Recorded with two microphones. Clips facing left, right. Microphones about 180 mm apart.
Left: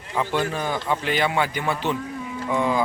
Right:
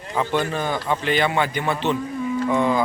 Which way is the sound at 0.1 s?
5° left (ahead or behind).